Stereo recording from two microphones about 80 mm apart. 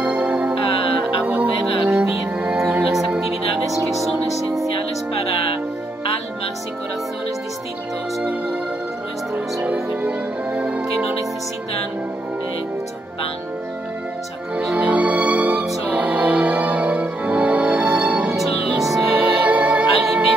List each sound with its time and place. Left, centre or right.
0.0 s music: centre
9.3 s music: right
14.5 s music: centre
18.8 s music: centre
19.1 s music: centre